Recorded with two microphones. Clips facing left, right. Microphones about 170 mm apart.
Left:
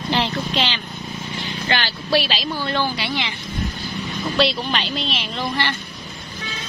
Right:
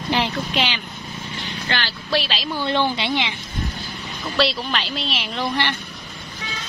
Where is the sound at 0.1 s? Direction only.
10° right (ahead or behind).